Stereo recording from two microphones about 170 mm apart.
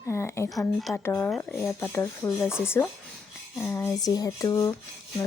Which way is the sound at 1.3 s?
5° left (ahead or behind).